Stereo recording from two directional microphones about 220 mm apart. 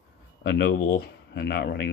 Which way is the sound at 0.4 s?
50° left (ahead or behind).